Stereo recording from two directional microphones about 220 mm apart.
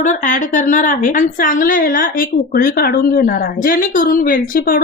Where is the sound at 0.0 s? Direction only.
35° left (ahead or behind).